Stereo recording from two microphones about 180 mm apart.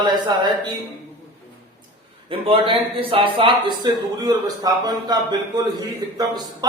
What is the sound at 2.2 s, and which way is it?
A man's voice, 30° right (ahead or behind).